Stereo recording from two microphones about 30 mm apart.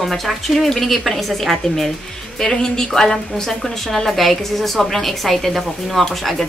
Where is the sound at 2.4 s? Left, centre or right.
Centre.